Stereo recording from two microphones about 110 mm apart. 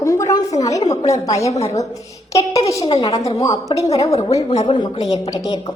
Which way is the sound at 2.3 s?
30° left (ahead or behind).